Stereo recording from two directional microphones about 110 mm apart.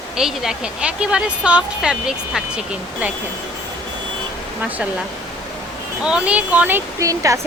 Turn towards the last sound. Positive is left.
turn(degrees=-30)  # may be behind; listen again after turning